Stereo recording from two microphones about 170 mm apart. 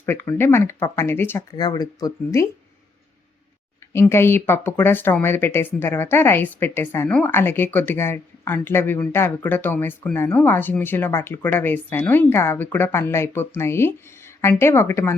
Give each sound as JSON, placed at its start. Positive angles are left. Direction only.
{"t": 0.0, "sound": "speech", "side_deg": 10}
{"t": 1.5, "sound": "speech", "side_deg": 25}
{"t": 4.1, "sound": "speech", "side_deg": 15}